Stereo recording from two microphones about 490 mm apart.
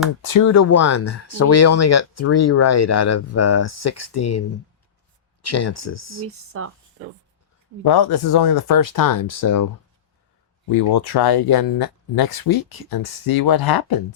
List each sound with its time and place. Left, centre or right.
0.3 s speech: left
5.7 s speech: left
6.2 s speech: right
7.9 s speech: left
10.7 s speech: left